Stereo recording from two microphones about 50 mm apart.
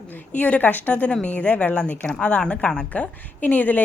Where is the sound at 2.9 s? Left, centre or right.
Left.